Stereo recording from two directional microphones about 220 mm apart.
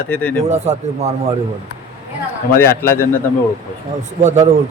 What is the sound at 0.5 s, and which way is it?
Speech, 30° right (ahead or behind).